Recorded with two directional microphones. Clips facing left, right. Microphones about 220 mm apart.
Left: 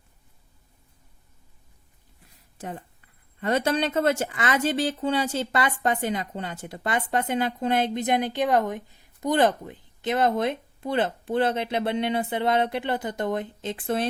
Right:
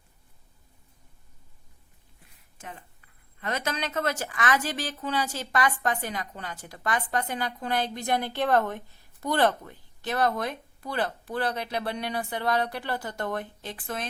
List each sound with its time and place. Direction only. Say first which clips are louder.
3.4 s a woman's voice: left 8 dB; 30° left (ahead or behind)